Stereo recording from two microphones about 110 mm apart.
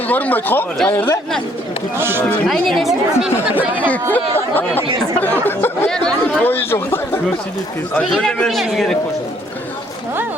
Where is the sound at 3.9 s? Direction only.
15° left (ahead or behind).